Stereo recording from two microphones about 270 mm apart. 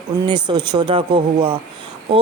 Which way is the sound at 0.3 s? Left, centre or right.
Centre.